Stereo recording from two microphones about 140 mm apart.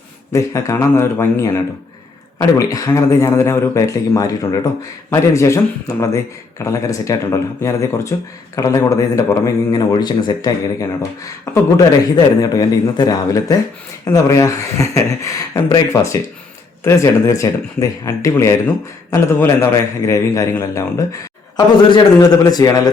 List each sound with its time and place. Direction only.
0.3 s speech: 20° left (ahead or behind)